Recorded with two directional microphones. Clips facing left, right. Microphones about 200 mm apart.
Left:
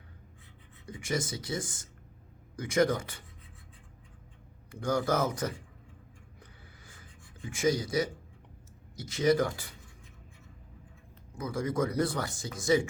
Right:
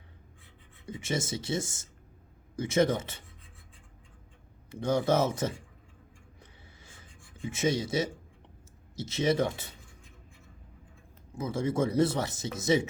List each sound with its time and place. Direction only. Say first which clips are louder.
0.9 s speech: right 1 dB; 25° right (ahead or behind)
4.7 s speech: right 3 dB; 25° right (ahead or behind)
6.4 s writing: even; 25° right (ahead or behind)
9.0 s speech: left 1 dB; 25° right (ahead or behind)
11.3 s speech: right 2 dB; 25° right (ahead or behind)